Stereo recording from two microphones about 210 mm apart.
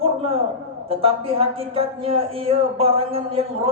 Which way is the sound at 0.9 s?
25° right (ahead or behind).